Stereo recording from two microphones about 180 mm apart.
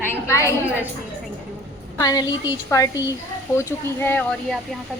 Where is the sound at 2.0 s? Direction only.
20° left (ahead or behind).